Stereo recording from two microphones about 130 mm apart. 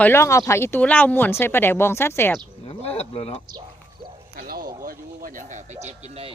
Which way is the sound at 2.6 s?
50° left (ahead or behind).